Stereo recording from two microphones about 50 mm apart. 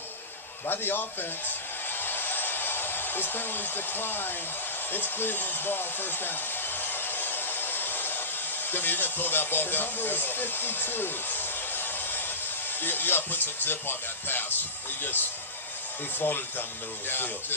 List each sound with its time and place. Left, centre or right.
0.7 s speech: left
2.0 s hair dryer: left
4.9 s speech: left
6.8 s a sound: left
8.7 s speech: left